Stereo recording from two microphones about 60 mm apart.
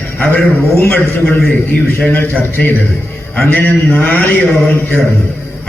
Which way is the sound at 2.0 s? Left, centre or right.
Left.